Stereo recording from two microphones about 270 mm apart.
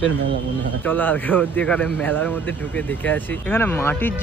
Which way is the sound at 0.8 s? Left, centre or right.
Centre.